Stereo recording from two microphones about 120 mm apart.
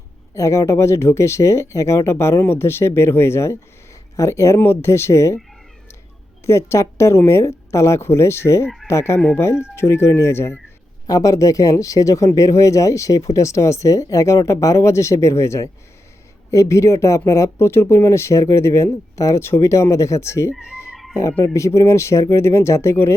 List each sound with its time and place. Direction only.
0.3 s speech: 25° left (ahead or behind)
6.4 s speech: 25° left (ahead or behind)
20.9 s music: 5° right (ahead or behind)
21.4 s speech: 25° left (ahead or behind)